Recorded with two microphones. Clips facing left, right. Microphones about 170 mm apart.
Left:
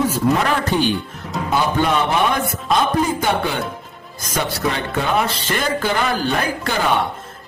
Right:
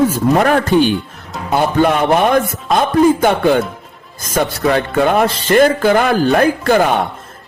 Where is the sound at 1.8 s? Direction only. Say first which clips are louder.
Right 8 dB; 55° right (ahead or behind).